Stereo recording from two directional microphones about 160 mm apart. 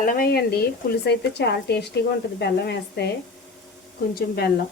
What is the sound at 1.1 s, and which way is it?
A woman's voice, 90° left.